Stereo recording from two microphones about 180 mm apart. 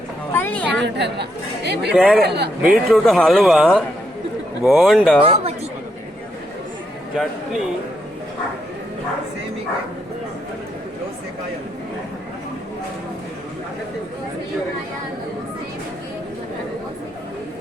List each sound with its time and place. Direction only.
0.3 s a sound: 10° left (ahead or behind)
0.8 s speech: 70° right (ahead or behind)
1.9 s speech: centre (ahead or behind)
2.2 s speech: 70° right (ahead or behind)
2.6 s speech: 5° right (ahead or behind)